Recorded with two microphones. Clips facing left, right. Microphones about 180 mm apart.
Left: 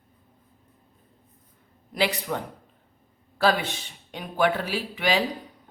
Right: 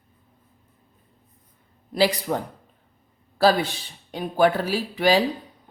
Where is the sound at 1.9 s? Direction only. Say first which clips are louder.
Right 5 dB; 35° right (ahead or behind).